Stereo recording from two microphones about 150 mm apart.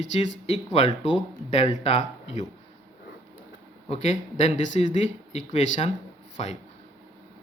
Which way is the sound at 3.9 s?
45° left (ahead or behind).